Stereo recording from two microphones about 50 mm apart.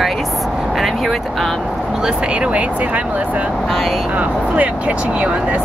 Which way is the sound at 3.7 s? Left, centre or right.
Centre.